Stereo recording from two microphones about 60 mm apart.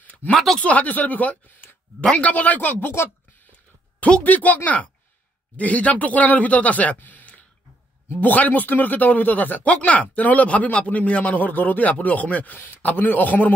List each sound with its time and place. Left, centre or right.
0.0 s a sound: left
0.3 s speech: centre
0.6 s speech: left
4.0 s speech: left